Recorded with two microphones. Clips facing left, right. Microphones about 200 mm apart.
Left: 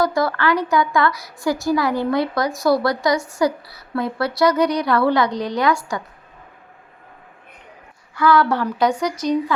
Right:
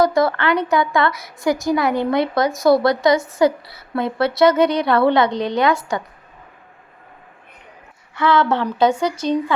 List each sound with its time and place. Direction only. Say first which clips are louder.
0.0 s a woman's voice: right 3 dB; 25° right (ahead or behind)
8.1 s a woman's voice: even; 25° right (ahead or behind)